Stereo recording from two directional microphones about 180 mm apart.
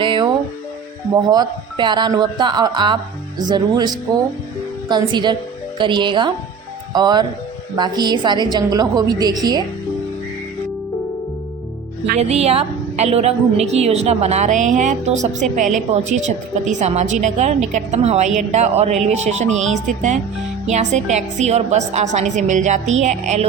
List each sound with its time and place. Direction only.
0.0 s music: 25° right (ahead or behind)
1.1 s a woman's voice: 20° right (ahead or behind)
12.2 s a woman's voice: 35° right (ahead or behind)
20.7 s a woman's voice: 40° right (ahead or behind)